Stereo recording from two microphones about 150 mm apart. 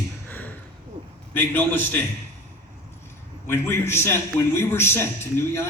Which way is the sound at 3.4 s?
15° left (ahead or behind).